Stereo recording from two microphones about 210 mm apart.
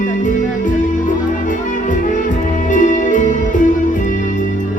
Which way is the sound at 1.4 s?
35° left (ahead or behind).